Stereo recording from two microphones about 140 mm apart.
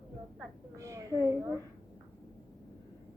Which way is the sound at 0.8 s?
20° right (ahead or behind).